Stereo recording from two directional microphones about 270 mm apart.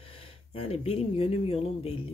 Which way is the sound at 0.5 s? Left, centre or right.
Left.